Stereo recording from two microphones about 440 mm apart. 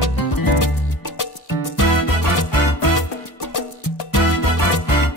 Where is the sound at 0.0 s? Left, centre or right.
Left.